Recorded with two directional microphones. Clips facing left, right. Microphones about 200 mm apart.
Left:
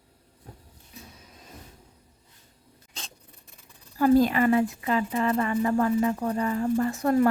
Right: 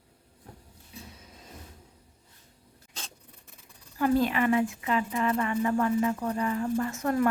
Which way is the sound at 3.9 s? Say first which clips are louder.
Left 5 dB; 35° left (ahead or behind).